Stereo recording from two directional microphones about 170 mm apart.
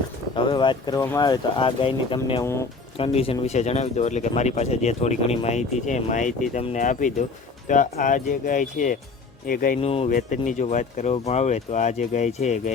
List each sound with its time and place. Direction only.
0.3 s speech: 30° left (ahead or behind)
2.4 s speech: 15° left (ahead or behind)
3.0 s speech: 35° left (ahead or behind); by 9.7 s 55° left (ahead or behind)
9.8 s speech: 35° left (ahead or behind)
10.1 s speech: 50° left (ahead or behind)